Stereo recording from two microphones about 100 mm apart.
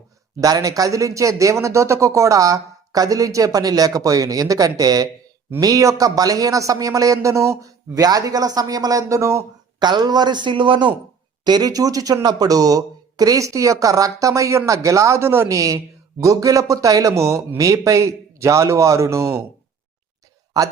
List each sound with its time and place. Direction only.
0.3 s speech: 35° right (ahead or behind)
9.8 s a man's voice: 45° right (ahead or behind)
11.4 s speech: 40° right (ahead or behind)
20.5 s a man's voice: 40° right (ahead or behind)